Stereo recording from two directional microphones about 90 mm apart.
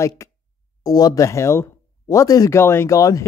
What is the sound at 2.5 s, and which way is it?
Speech, 30° left (ahead or behind).